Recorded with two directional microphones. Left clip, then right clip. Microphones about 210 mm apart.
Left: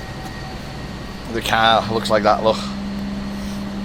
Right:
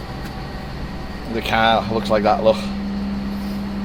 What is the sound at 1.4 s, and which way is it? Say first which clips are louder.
Speech: left 1 dB; 25° left (ahead or behind).